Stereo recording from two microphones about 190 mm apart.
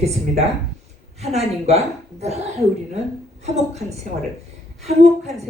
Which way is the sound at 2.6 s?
15° right (ahead or behind).